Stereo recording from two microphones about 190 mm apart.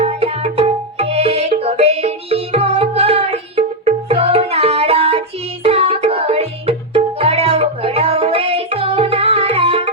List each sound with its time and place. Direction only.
0.0 s music: 35° right (ahead or behind)